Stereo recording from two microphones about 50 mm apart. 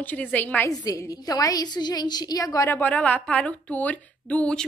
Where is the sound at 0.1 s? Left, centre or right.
Left.